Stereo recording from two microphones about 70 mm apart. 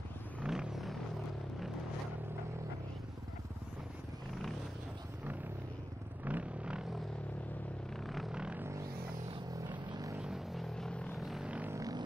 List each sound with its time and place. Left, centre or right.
0.5 s vehicle: centre
6.2 s vehicle: centre
8.3 s vehicle: centre
9.7 s vehicle: right
10.2 s vehicle: centre
10.9 s vehicle: centre
11.1 s vehicle: centre
11.4 s vehicle: centre